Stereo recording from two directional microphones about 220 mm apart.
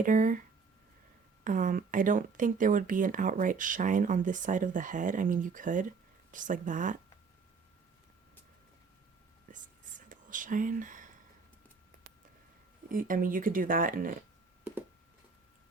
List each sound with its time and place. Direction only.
0.0 s speech: 35° right (ahead or behind)
1.5 s speech: 35° right (ahead or behind)
9.5 s whispering: 35° right (ahead or behind)
10.1 s a sound: 35° right (ahead or behind)
12.9 s speech: 40° right (ahead or behind)